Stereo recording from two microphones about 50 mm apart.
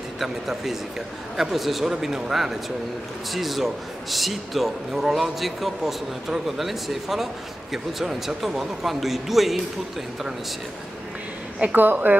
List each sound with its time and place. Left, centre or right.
0.2 s a man's voice: centre
11.7 s a woman's voice: right